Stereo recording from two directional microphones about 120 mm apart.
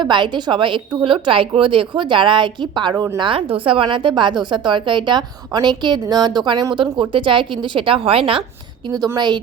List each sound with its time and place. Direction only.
0.0 s a woman's voice: 40° right (ahead or behind)
2.9 s speech: 25° right (ahead or behind)
3.2 s a woman's voice: 45° right (ahead or behind)
9.1 s a woman's voice: 40° right (ahead or behind)